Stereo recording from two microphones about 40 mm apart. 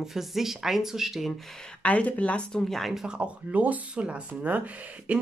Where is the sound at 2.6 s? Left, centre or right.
Centre.